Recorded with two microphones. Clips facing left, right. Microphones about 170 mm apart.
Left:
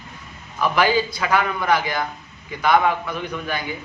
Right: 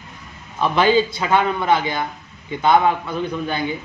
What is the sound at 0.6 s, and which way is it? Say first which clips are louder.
A man's voice: right 3 dB; 25° right (ahead or behind).